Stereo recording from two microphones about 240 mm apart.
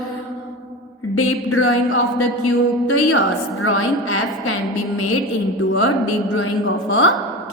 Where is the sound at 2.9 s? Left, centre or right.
Left.